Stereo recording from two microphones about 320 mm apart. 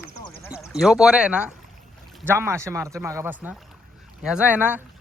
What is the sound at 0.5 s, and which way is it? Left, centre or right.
Speech, centre.